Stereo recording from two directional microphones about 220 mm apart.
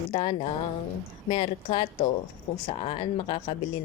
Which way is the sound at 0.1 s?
20° left (ahead or behind).